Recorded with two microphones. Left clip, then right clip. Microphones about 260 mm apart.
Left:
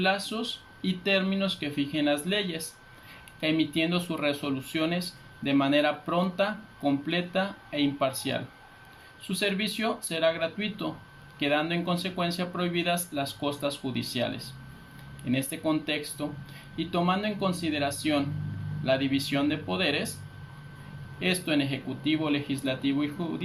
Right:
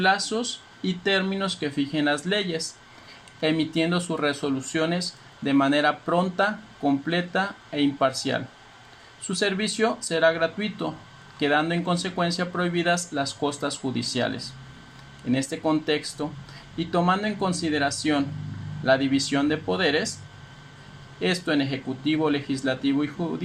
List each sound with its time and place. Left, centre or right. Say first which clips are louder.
0.0 s speech: right 5 dB; right
21.2 s speech: right 3 dB; right